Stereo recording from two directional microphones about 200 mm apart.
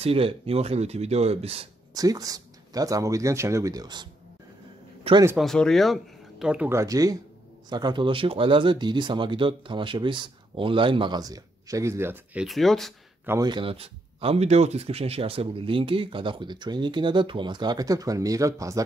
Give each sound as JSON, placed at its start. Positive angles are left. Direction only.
{"t": 0.0, "sound": "speech", "side_deg": -30}
{"t": 2.0, "sound": "speech", "side_deg": -20}
{"t": 5.4, "sound": "speech", "side_deg": 0}
{"t": 12.4, "sound": "speech", "side_deg": 0}
{"t": 13.2, "sound": "speech", "side_deg": -15}